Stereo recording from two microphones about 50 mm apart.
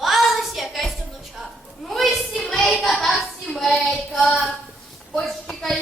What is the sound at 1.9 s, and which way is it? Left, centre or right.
Children playing, centre.